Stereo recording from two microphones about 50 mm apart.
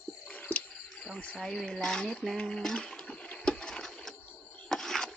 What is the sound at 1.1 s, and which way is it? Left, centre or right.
Speech, centre.